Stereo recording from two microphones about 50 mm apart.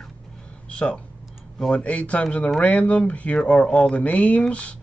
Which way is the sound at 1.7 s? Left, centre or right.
Left.